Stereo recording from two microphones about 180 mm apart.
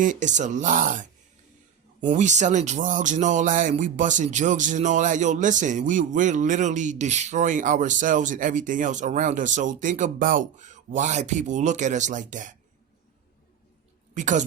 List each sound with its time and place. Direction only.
0.0 s speech: 45° right (ahead or behind)
2.1 s speech: 40° right (ahead or behind)
14.1 s a woman's voice: 45° right (ahead or behind)